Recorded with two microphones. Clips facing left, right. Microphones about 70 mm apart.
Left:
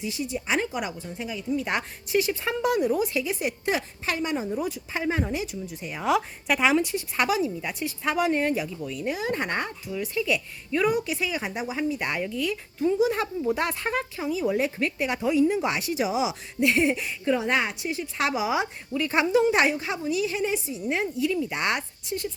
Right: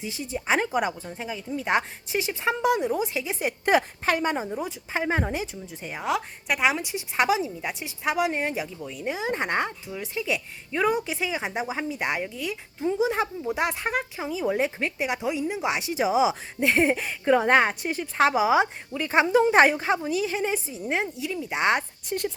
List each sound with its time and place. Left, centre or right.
0.0 s speech: right
1.6 s a woman's voice: right
3.7 s speech: right
4.4 s a woman's voice: right
6.1 s a woman's voice: centre
14.3 s a woman's voice: right